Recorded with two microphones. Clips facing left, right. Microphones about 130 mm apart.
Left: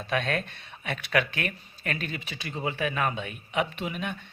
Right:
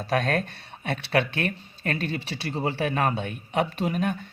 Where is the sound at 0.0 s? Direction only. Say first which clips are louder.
Right 4 dB; 40° right (ahead or behind).